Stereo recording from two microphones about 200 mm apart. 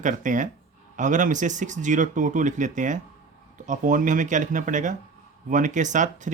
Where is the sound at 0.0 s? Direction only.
40° right (ahead or behind).